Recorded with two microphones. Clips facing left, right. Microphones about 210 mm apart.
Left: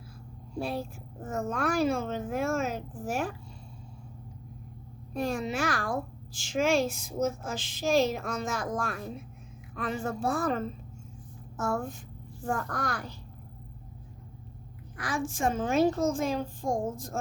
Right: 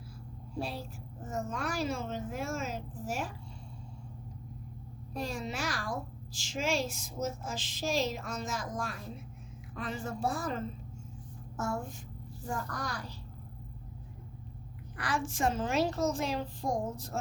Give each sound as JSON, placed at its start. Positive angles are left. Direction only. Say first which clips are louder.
{"t": 0.6, "sound": "a child's voice", "louder": "left 6 dB", "side_deg": 55}
{"t": 5.2, "sound": "a child's voice", "louder": "left 7 dB", "side_deg": 55}
{"t": 11.6, "sound": "a child's voice", "louder": "left 4 dB", "side_deg": 55}
{"t": 14.9, "sound": "a child's voice", "louder": "left 2 dB", "side_deg": 45}